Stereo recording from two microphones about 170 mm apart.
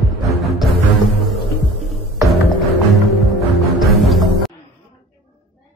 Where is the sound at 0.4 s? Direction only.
Centre (ahead or behind).